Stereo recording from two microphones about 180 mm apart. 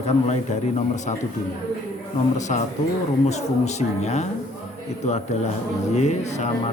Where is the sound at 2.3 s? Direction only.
40° left (ahead or behind).